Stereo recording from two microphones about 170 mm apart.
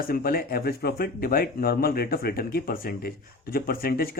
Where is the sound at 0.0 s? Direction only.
60° left (ahead or behind).